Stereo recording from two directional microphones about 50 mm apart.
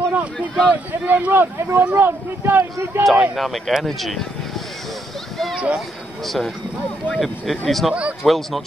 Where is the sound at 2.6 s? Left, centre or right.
Right.